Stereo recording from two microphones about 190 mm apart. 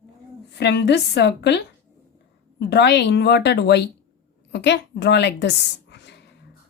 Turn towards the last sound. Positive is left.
turn(degrees=65)  # may be behind; listen again after turning